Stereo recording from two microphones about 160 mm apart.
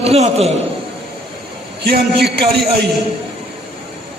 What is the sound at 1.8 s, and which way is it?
Speech, 90° right.